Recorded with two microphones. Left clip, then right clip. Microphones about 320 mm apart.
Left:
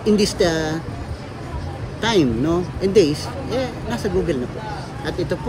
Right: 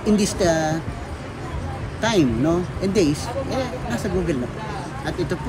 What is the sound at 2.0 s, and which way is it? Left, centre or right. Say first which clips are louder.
Speech: left 2 dB; centre.